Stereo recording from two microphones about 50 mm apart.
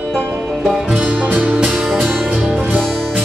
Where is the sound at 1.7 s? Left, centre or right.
Centre.